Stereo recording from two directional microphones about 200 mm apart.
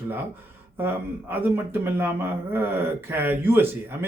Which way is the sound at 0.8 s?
10° right (ahead or behind).